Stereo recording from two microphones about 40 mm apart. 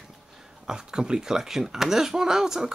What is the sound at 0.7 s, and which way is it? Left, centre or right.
Speech, centre.